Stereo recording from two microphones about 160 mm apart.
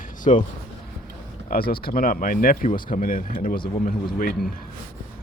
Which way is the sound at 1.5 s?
70° left (ahead or behind).